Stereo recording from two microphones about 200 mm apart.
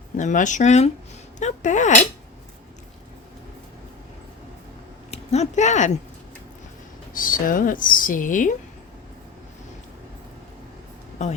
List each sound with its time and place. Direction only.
0.2 s speech: 40° left (ahead or behind)
5.1 s speech: 35° left (ahead or behind)
7.1 s speech: 45° left (ahead or behind)
11.2 s speech: 35° left (ahead or behind)